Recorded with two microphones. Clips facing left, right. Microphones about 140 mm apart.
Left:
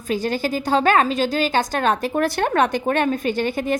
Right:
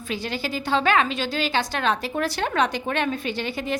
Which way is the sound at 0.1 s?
45° left (ahead or behind).